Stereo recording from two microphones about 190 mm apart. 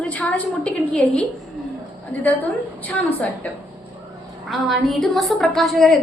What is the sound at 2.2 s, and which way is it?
A woman's voice, 10° left (ahead or behind).